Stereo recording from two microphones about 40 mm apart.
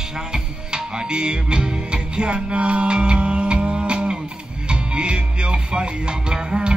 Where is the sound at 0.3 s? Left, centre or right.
Right.